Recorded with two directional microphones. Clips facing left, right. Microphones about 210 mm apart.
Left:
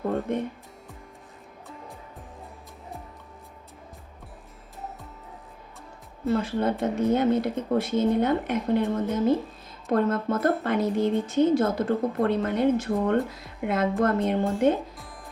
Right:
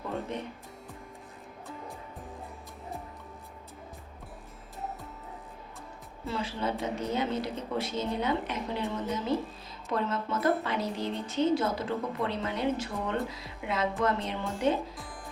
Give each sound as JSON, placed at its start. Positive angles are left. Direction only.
{"t": 0.3, "sound": "a woman's voice", "side_deg": 50}
{"t": 6.2, "sound": "a woman's voice", "side_deg": 50}